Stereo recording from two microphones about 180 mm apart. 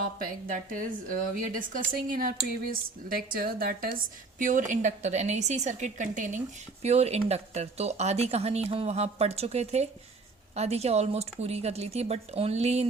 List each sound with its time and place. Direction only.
0.2 s a woman's voice: 45° right (ahead or behind)